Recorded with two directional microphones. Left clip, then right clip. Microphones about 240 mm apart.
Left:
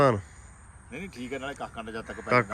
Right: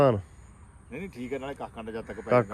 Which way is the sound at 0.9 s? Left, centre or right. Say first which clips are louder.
Right 1 dB; right.